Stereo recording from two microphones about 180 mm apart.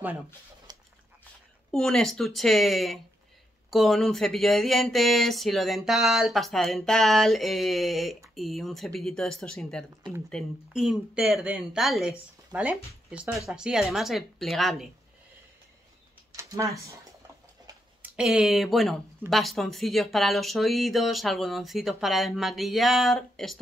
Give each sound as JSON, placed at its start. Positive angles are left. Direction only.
{"t": 0.7, "sound": "a sound", "side_deg": -20}
{"t": 1.7, "sound": "speech", "side_deg": 5}
{"t": 16.3, "sound": "speech", "side_deg": -15}
{"t": 18.0, "sound": "speech", "side_deg": -5}